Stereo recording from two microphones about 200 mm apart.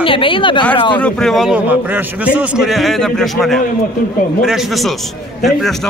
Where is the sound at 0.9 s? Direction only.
5° left (ahead or behind).